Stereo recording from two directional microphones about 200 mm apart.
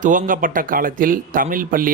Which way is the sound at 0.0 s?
40° right (ahead or behind).